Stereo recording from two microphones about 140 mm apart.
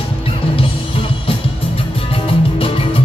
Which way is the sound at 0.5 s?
40° left (ahead or behind).